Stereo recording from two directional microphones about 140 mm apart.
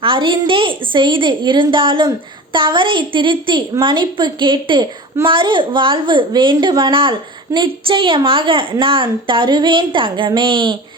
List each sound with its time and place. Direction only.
0.0 s a woman's voice: 40° right (ahead or behind)